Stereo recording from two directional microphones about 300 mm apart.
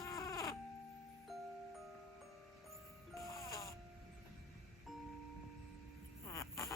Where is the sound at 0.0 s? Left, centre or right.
Centre.